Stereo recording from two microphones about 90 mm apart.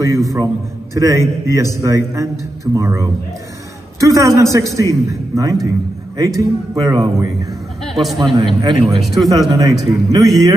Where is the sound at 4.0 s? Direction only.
35° right (ahead or behind).